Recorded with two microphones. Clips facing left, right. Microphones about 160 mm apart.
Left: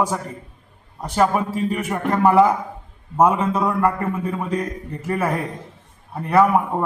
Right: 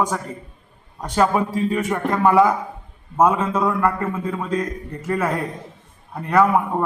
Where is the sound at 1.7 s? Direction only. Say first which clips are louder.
Right 1 dB; 10° left (ahead or behind).